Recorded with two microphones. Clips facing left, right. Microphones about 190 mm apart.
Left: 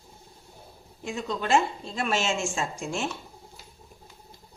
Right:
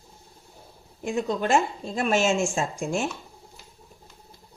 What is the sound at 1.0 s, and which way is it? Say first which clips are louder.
A woman's voice: right 5 dB; 50° right (ahead or behind).